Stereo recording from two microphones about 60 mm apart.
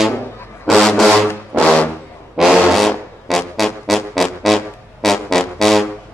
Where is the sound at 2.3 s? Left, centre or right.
Centre.